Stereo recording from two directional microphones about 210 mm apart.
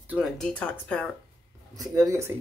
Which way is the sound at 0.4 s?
5° left (ahead or behind).